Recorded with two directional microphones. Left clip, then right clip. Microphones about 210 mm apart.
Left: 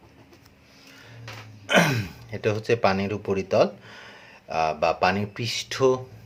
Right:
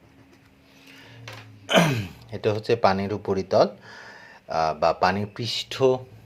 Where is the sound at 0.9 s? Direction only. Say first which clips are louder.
Right 1 dB; 20° right (ahead or behind).